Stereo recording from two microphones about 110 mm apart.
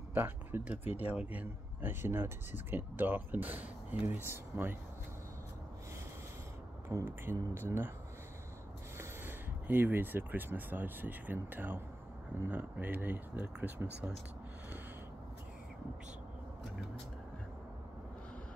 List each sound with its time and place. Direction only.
0.1 s speech: 20° right (ahead or behind)
6.9 s speech: 25° right (ahead or behind)
8.9 s speech: 20° right (ahead or behind)